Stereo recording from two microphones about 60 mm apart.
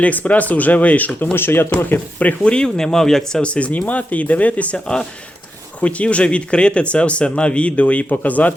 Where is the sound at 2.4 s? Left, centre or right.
Centre.